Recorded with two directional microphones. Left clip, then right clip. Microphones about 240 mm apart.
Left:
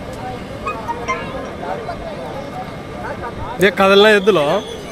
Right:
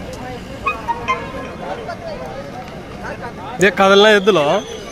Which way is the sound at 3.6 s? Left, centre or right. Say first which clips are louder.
Even; centre.